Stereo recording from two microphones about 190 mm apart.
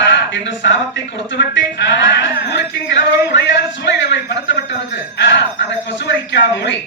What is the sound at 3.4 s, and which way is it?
Speech, 70° left (ahead or behind).